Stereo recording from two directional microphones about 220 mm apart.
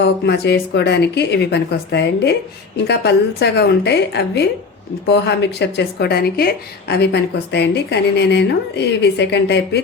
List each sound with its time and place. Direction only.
0.0 s a woman's voice: 50° left (ahead or behind)